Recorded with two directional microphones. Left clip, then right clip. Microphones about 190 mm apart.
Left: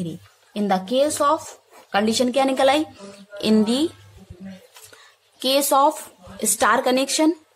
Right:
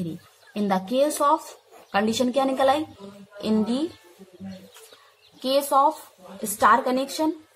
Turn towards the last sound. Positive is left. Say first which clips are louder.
# left 5 dB
turn(degrees=35)  # may be behind; listen again after turning